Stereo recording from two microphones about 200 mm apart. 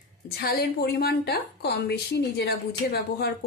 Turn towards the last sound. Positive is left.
turn(degrees=50)  # may be behind; listen again after turning